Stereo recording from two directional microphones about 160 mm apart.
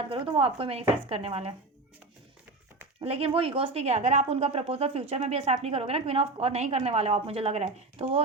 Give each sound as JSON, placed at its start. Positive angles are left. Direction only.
{"t": 0.1, "sound": "speech", "side_deg": -35}
{"t": 3.0, "sound": "speech", "side_deg": -35}